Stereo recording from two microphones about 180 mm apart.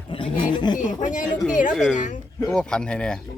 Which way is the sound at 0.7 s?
45° left (ahead or behind).